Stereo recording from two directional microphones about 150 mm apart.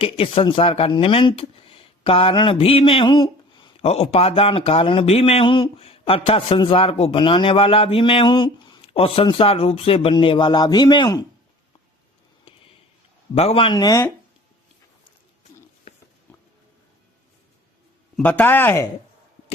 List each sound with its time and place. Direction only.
0.0 s speech: 35° left (ahead or behind)
13.3 s speech: 40° left (ahead or behind)
13.7 s speech: 25° left (ahead or behind)
18.2 s speech: 10° left (ahead or behind)